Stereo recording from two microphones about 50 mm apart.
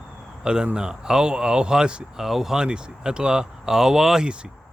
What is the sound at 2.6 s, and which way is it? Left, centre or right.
Speech, centre.